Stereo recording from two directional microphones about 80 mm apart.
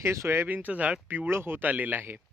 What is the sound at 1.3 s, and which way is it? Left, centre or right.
Speech, right.